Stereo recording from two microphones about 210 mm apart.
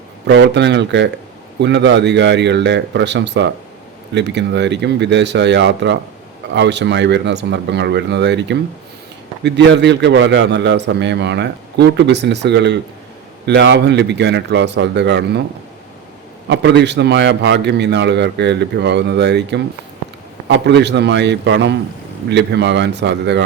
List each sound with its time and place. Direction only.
0.3 s a man's voice: 55° right (ahead or behind)
16.5 s a man's voice: 55° right (ahead or behind)